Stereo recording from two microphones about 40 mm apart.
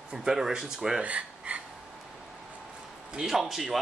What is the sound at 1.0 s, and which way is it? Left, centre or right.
Speech, right.